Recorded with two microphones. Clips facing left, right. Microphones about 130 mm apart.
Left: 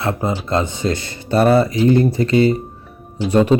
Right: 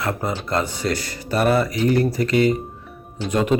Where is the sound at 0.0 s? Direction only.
20° left (ahead or behind).